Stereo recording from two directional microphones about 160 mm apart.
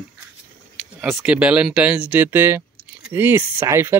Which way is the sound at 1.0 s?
5° right (ahead or behind).